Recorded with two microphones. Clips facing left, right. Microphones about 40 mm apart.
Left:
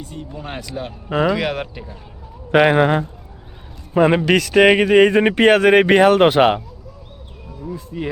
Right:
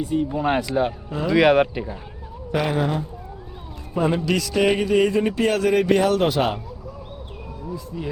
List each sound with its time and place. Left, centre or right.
0.0 s speech: centre
0.3 s speech: right
0.6 s speech: centre
2.5 s speech: left
7.9 s speech: left